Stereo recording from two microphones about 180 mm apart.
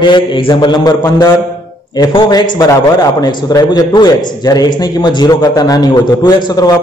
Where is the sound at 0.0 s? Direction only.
25° left (ahead or behind).